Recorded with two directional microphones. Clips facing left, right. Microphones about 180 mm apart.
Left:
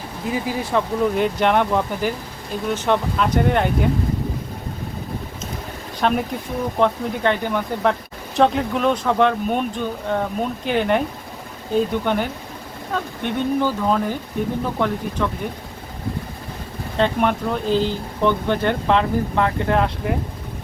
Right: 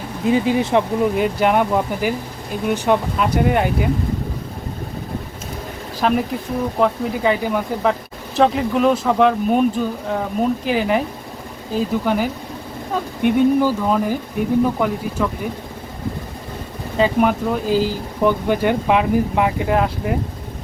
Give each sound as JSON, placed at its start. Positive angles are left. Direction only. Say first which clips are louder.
{"t": 0.3, "sound": "speech", "louder": "right 7 dB", "side_deg": -25}
{"t": 1.1, "sound": "speech", "louder": "even", "side_deg": -5}
{"t": 6.0, "sound": "speech", "louder": "right 2 dB", "side_deg": 0}
{"t": 17.0, "sound": "speech", "louder": "right 3 dB", "side_deg": -5}